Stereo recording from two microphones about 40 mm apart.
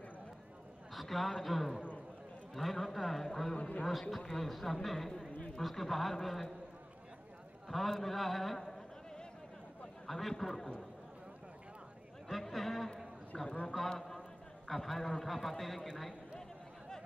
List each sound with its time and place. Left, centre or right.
0.9 s a man's voice: centre
3.5 s a man's voice: left
4.2 s a man's voice: centre
7.6 s a man's voice: centre
12.3 s a sound: centre
13.3 s a man's voice: centre